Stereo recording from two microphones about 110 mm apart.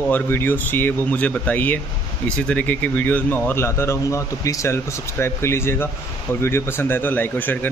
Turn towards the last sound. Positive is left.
turn(degrees=15)  # may be behind; listen again after turning